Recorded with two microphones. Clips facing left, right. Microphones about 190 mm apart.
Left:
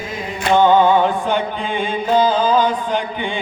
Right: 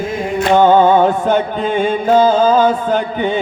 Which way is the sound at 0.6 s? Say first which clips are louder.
Right 3 dB; 45° right (ahead or behind).